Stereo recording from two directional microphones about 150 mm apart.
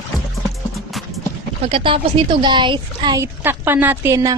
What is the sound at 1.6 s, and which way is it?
Speech, 40° right (ahead or behind).